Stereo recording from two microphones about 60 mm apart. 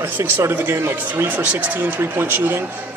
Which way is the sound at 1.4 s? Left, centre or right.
Right.